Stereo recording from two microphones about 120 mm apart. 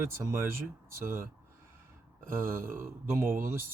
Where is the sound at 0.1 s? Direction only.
20° right (ahead or behind).